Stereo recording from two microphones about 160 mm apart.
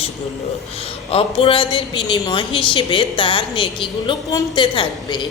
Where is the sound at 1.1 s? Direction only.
35° left (ahead or behind).